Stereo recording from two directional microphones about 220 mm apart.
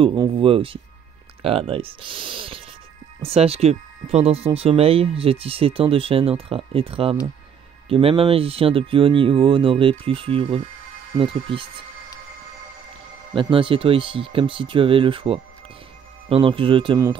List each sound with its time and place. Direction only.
0.0 s speech: 20° right (ahead or behind)
13.3 s speech: 25° right (ahead or behind)